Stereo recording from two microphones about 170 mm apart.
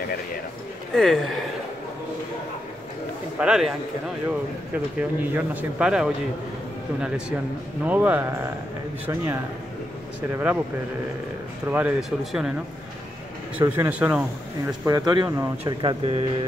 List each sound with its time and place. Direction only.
0.9 s speech: 5° left (ahead or behind)
3.3 s speech: 5° right (ahead or behind)
4.7 s speech: 10° right (ahead or behind)
10.3 s speech: 10° right (ahead or behind)
11.7 s speech: 5° right (ahead or behind)
13.6 s speech: 10° right (ahead or behind)
14.9 s speech: 25° right (ahead or behind)
15.6 s speech: 30° right (ahead or behind)